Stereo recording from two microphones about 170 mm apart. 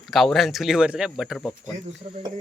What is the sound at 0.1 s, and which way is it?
Speech, centre (ahead or behind).